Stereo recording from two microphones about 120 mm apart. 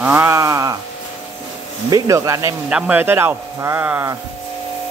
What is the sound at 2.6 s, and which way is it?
A man's voice, 10° right (ahead or behind).